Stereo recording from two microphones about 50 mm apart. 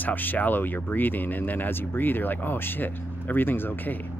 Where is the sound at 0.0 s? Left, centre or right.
Left.